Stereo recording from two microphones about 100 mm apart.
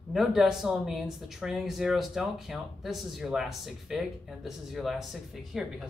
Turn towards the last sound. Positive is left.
turn(degrees=0)  # may be behind; listen again after turning